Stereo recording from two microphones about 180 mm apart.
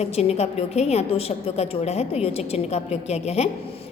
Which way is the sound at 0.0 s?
35° left (ahead or behind).